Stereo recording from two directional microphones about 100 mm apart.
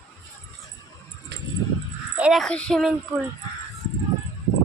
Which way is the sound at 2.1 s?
10° right (ahead or behind).